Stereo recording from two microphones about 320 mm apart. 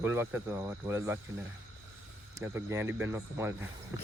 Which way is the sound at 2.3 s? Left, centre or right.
Centre.